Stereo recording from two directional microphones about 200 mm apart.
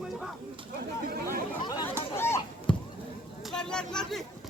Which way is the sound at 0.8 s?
50° right (ahead or behind).